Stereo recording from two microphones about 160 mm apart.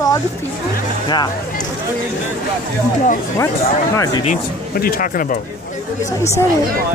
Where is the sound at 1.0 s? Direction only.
25° left (ahead or behind).